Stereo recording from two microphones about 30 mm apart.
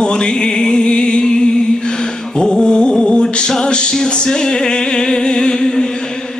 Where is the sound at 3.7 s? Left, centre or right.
Left.